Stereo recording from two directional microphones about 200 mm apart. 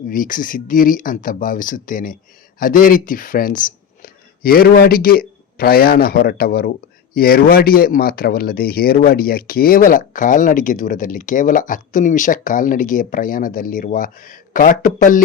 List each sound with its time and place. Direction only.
0.1 s speech: 45° left (ahead or behind)